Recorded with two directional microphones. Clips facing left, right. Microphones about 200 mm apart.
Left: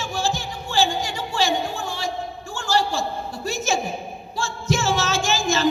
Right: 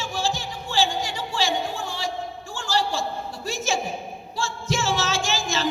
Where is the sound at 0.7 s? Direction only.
45° left (ahead or behind).